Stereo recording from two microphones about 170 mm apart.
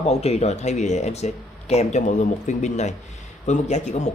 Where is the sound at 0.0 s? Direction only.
35° left (ahead or behind).